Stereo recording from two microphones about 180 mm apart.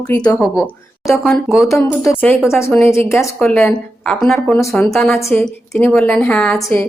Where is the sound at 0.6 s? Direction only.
15° left (ahead or behind).